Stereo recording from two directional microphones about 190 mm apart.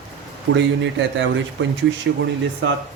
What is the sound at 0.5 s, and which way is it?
Speech, 70° right (ahead or behind).